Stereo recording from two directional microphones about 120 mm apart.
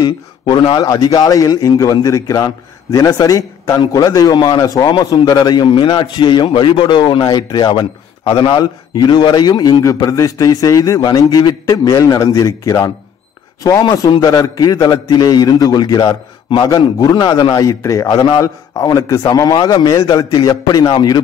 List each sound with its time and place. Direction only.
0.0 s a man's voice: 40° left (ahead or behind)